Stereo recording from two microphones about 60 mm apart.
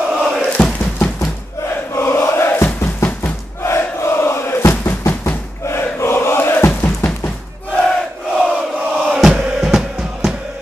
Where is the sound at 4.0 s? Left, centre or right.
Left.